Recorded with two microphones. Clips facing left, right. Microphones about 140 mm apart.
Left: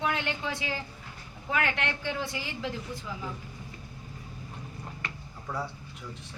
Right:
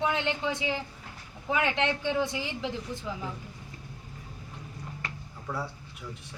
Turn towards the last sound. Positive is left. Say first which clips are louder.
# even
turn(degrees=0)  # may be behind; listen again after turning